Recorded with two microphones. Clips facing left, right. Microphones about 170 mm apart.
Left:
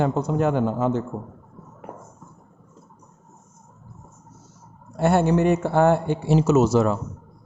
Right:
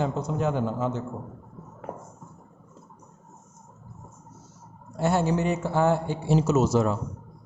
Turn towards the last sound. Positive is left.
turn(degrees=75)  # may be behind; listen again after turning